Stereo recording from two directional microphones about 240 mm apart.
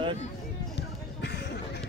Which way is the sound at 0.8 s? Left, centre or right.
Left.